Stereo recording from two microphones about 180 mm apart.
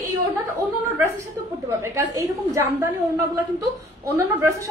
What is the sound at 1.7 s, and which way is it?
A woman's voice, 15° right (ahead or behind).